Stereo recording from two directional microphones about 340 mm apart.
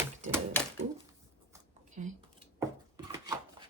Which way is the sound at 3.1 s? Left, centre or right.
Centre.